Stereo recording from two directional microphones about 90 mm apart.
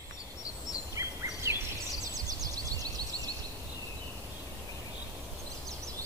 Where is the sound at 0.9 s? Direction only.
35° right (ahead or behind).